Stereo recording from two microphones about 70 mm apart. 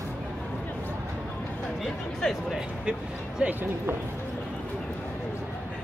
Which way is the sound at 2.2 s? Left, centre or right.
Centre.